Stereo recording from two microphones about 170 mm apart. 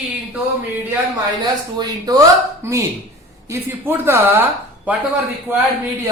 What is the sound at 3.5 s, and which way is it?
Speech, 15° right (ahead or behind).